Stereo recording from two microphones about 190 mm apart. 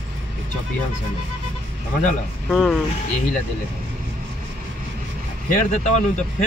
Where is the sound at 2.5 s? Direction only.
5° left (ahead or behind).